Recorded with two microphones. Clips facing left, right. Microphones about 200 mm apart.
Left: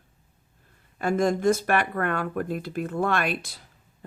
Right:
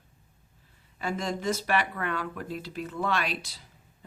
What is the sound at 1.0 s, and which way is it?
Speech, 50° left (ahead or behind).